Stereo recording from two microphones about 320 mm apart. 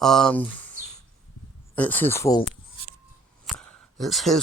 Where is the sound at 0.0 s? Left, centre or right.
Centre.